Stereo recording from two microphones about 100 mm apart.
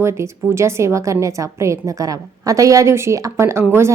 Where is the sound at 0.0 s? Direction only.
25° right (ahead or behind).